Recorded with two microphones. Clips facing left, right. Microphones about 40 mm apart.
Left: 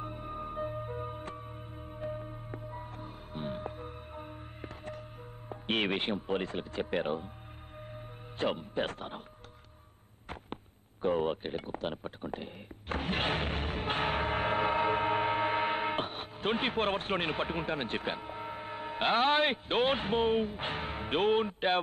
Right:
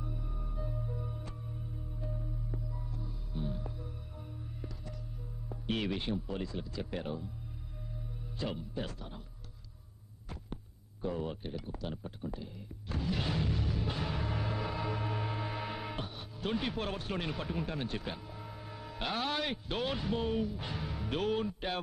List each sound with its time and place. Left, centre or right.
0.0 s music: left
5.5 s speech: left
8.4 s speech: left
10.3 s a sound: left